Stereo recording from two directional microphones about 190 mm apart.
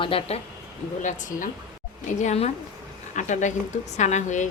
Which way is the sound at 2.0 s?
40° left (ahead or behind).